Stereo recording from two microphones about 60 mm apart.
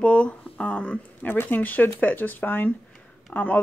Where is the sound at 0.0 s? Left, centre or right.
Centre.